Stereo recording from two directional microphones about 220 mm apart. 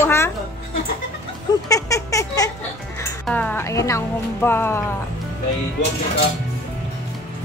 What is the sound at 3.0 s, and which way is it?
Music, 5° left (ahead or behind).